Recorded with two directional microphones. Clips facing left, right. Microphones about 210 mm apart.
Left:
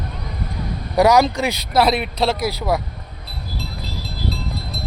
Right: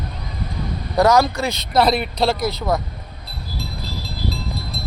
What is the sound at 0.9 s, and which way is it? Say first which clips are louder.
Speech: left 1 dB; 15° left (ahead or behind).